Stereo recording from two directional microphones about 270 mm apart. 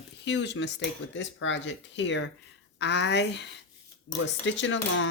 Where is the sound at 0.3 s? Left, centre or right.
Left.